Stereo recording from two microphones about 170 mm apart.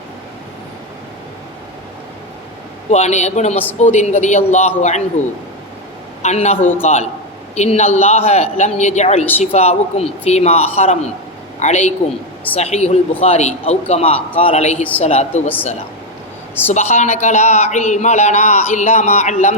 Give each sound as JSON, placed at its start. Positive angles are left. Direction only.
{"t": 2.9, "sound": "a man's voice", "side_deg": 40}
{"t": 6.2, "sound": "a man's voice", "side_deg": 40}
{"t": 16.7, "sound": "a man's voice", "side_deg": 45}